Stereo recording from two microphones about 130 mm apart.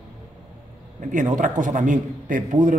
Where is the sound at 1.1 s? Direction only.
85° right.